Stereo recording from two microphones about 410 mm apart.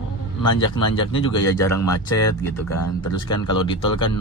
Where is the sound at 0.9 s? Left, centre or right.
Centre.